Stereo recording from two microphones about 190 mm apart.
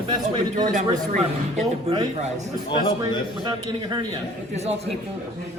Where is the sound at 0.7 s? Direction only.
40° right (ahead or behind).